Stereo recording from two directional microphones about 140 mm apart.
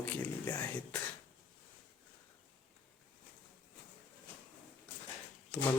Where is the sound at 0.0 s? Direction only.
10° left (ahead or behind).